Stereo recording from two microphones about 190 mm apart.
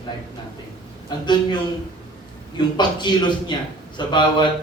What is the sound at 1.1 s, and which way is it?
Speech, 25° left (ahead or behind).